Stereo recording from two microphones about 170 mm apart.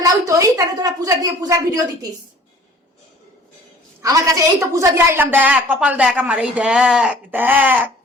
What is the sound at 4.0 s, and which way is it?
A woman's voice, 20° right (ahead or behind).